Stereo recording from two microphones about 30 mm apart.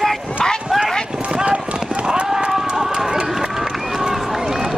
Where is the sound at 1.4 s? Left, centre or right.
Right.